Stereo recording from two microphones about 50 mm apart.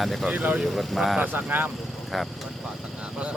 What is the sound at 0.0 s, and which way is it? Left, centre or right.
Speech, centre.